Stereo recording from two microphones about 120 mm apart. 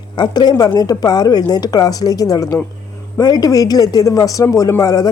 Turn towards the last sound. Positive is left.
turn(degrees=30)  # may be behind; listen again after turning